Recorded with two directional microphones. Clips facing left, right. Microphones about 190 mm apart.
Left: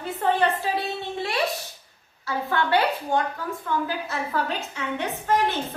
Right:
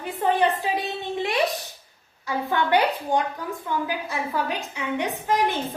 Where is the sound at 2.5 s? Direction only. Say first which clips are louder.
Right 1 dB; 15° right (ahead or behind).